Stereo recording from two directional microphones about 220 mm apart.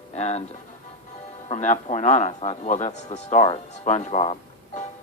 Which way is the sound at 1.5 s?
30° left (ahead or behind).